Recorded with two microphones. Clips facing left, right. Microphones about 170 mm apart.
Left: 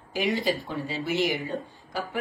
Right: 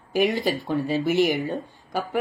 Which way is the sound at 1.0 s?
45° right (ahead or behind).